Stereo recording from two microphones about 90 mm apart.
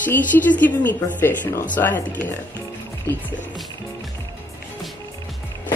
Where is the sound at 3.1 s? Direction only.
35° right (ahead or behind).